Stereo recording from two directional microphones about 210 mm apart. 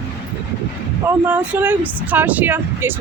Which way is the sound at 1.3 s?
10° right (ahead or behind).